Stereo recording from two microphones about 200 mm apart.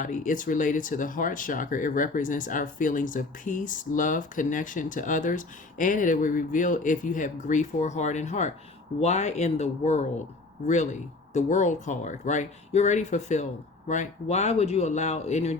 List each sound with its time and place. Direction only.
0.0 s speech: 40° left (ahead or behind)
11.3 s speech: 35° left (ahead or behind)